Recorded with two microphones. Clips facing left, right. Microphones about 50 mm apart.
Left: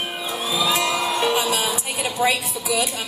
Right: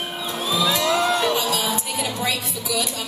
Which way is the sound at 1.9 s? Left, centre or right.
Left.